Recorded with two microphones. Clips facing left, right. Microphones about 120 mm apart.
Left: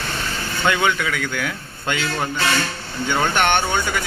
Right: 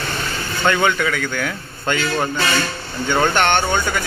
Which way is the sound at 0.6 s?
5° left (ahead or behind).